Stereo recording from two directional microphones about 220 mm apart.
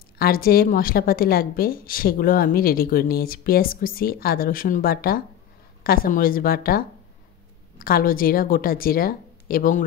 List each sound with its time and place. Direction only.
0.2 s a woman's voice: 40° left (ahead or behind)
7.8 s a woman's voice: 40° left (ahead or behind)